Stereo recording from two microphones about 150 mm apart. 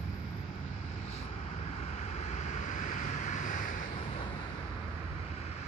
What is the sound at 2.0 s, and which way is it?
Vehicle, 50° left (ahead or behind).